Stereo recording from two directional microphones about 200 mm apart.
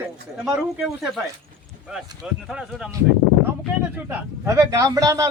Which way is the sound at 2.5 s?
5° right (ahead or behind).